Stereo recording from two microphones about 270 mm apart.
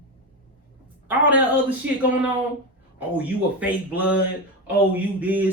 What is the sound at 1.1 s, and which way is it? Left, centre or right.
Speech, centre.